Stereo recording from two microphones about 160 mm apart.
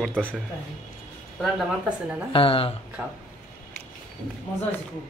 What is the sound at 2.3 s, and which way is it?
Speech, 35° left (ahead or behind).